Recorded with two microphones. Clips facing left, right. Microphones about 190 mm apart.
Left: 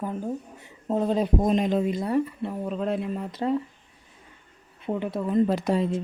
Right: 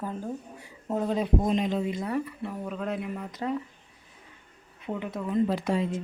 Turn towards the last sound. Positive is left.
turn(degrees=40)  # may be behind; listen again after turning